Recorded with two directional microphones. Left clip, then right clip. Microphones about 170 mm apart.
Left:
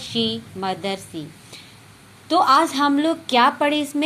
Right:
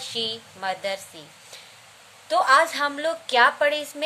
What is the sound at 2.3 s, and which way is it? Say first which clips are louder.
Speech: left 2 dB; 15° left (ahead or behind).